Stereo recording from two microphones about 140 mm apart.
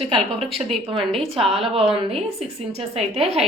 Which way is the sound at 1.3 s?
45° right (ahead or behind).